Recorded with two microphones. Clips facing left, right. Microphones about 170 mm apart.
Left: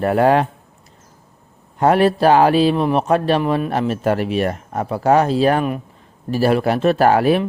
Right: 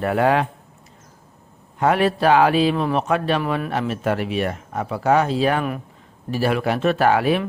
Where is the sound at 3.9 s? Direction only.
40° left (ahead or behind).